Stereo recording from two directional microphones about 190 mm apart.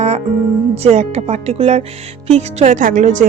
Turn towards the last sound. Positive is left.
turn(degrees=-40)  # may be behind; listen again after turning